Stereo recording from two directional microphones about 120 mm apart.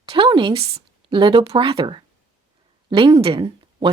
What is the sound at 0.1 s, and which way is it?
Speech, 45° right (ahead or behind).